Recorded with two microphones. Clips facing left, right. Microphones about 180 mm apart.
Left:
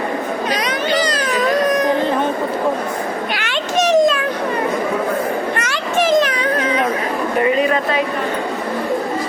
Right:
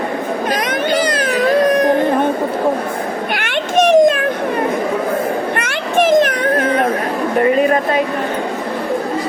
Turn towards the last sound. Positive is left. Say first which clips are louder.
# right 3 dB
turn(degrees=-45)  # may be behind; listen again after turning